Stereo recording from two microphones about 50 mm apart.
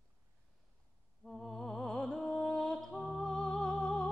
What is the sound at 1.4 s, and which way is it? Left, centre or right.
Music, centre.